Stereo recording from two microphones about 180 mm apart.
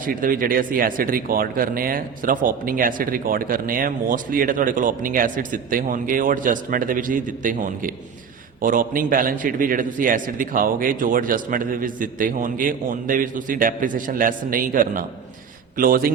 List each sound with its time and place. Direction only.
0.0 s speech: 50° right (ahead or behind)